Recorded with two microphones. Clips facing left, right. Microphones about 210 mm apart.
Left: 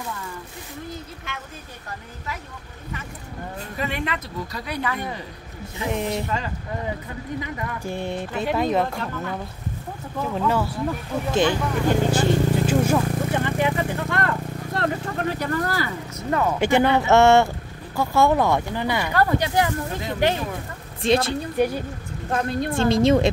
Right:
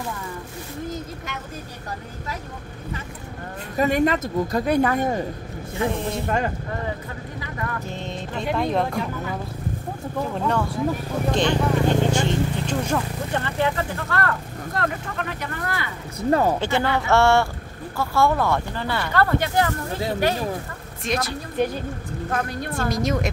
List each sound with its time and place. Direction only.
3.7 s speech: 45° right (ahead or behind)
5.9 s speech: 15° left (ahead or behind)
6.2 s speech: 50° right (ahead or behind)
7.3 s speech: 15° left (ahead or behind)
11.3 s vehicle: 5° left (ahead or behind)
14.8 s speech: 35° left (ahead or behind)
16.2 s speech: 35° right (ahead or behind)
16.5 s a woman's voice: 15° left (ahead or behind)
21.0 s a woman's voice: 30° left (ahead or behind)
21.5 s speech: 10° left (ahead or behind)
22.3 s a woman's voice: 25° left (ahead or behind)